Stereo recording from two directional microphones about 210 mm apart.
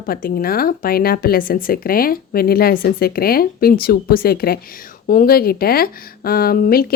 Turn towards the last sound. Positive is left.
turn(degrees=45)  # may be behind; listen again after turning